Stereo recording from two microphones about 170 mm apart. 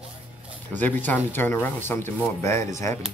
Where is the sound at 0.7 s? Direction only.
10° left (ahead or behind).